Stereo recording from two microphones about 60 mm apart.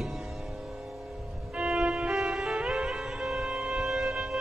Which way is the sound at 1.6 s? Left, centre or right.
Centre.